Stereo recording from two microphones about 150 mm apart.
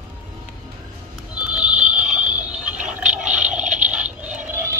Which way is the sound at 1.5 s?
5° right (ahead or behind).